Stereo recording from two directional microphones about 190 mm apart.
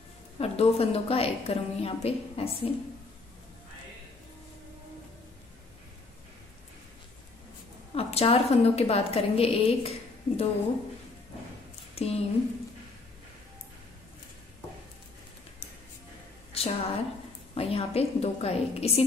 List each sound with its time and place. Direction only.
0.4 s a woman's voice: 30° left (ahead or behind)
7.9 s a woman's voice: 30° left (ahead or behind)
11.9 s a sound: 30° left (ahead or behind)
16.5 s a woman's voice: 30° left (ahead or behind)